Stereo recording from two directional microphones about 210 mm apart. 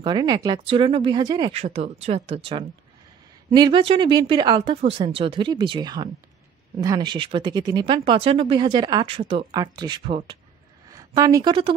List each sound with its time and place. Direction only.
0.0 s a woman's voice: 20° right (ahead or behind)